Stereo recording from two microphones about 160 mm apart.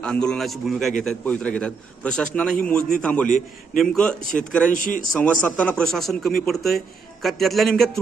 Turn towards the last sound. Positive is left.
turn(degrees=0)  # may be behind; listen again after turning